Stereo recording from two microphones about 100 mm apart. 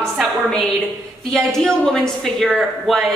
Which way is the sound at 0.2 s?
5° left (ahead or behind).